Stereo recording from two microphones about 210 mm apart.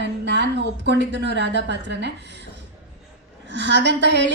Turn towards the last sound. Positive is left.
turn(degrees=-55)  # may be behind; listen again after turning